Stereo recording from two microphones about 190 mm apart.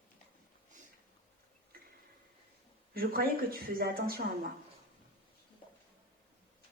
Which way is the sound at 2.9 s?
50° right (ahead or behind).